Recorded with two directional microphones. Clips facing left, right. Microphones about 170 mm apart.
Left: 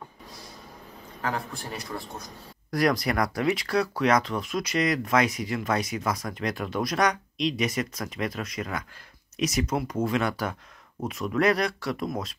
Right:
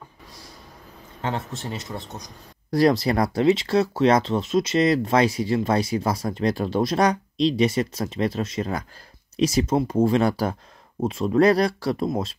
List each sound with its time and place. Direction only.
1.2 s speech: 25° right (ahead or behind)